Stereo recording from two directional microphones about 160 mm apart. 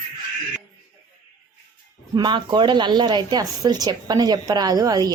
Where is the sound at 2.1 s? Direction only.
30° right (ahead or behind).